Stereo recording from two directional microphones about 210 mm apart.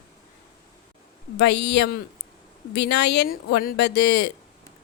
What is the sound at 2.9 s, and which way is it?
Speech, 50° left (ahead or behind).